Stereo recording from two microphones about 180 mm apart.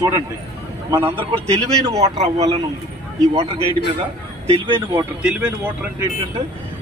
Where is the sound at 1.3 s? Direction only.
20° right (ahead or behind).